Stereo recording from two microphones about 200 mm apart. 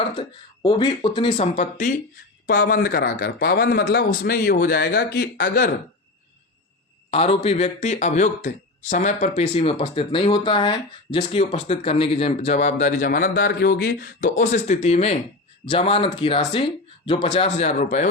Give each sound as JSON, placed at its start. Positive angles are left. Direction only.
{"t": 0.2, "sound": "a man's voice", "side_deg": 25}
{"t": 7.1, "sound": "speech", "side_deg": 30}